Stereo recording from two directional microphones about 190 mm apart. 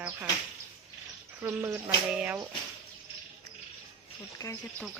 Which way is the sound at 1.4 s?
10° right (ahead or behind).